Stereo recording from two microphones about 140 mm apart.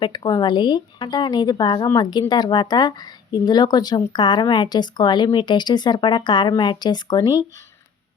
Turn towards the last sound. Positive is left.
turn(degrees=30)  # may be behind; listen again after turning